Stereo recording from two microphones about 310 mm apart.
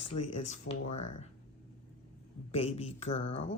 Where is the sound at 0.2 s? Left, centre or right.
Left.